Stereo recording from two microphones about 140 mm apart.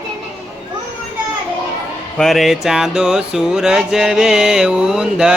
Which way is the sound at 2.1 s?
Centre (ahead or behind).